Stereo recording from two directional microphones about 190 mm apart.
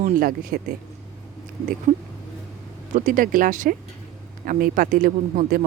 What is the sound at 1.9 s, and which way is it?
Speech, 35° right (ahead or behind).